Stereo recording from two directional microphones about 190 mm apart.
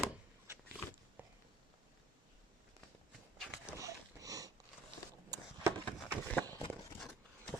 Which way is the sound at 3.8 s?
15° right (ahead or behind).